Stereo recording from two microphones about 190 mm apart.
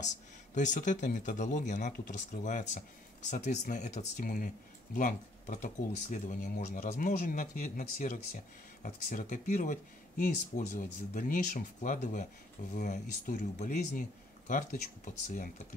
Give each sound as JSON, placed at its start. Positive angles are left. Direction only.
{"t": 0.0, "sound": "speech", "side_deg": 40}